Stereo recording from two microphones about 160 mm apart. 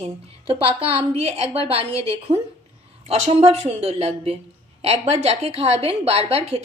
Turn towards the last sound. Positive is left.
turn(degrees=-40)  # may be behind; listen again after turning